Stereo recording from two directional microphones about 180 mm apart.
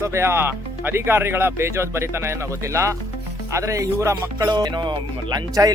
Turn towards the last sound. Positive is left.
turn(degrees=-20)  # may be behind; listen again after turning